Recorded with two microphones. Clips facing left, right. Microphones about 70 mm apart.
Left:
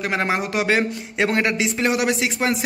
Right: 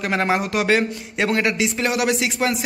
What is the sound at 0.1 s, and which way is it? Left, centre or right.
Speech, centre.